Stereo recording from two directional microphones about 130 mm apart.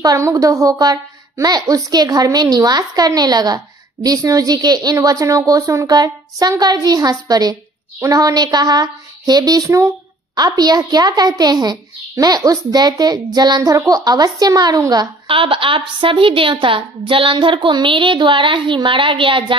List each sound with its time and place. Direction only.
0.0 s a woman's voice: 25° right (ahead or behind)
15.2 s speech: 40° right (ahead or behind)